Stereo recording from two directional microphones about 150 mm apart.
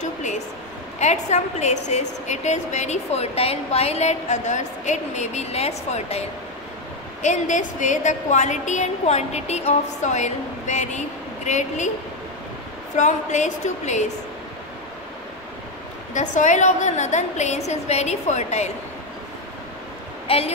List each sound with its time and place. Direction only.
0.0 s a sound: 55° left (ahead or behind)
0.9 s a woman's voice: 50° left (ahead or behind)
12.9 s a woman's voice: 55° left (ahead or behind)
16.1 s a woman's voice: 55° left (ahead or behind)
20.2 s speech: 40° left (ahead or behind)